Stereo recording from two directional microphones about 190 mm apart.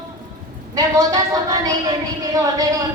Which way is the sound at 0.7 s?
20° right (ahead or behind).